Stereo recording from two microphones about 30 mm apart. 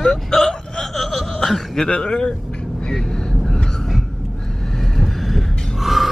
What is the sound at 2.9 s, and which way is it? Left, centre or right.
Vehicle, left.